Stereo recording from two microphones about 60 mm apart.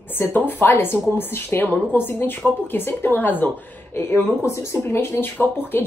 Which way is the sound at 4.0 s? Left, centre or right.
Left.